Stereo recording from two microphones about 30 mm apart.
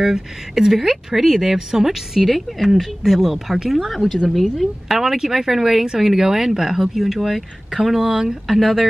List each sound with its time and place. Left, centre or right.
0.0 s speech: centre
3.7 s speech: centre
4.6 s speech: centre
8.0 s speech: right
8.5 s speech: centre